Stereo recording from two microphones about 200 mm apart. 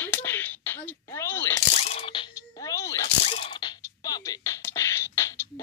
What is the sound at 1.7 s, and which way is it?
Music, 35° left (ahead or behind).